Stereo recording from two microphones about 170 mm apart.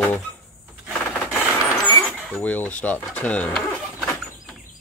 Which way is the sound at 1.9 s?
10° left (ahead or behind).